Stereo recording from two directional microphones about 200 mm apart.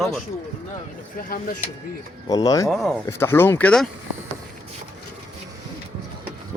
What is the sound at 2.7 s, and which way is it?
Speech, centre (ahead or behind).